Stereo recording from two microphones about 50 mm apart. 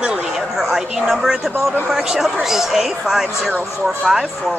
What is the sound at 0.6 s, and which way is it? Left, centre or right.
Speech, centre.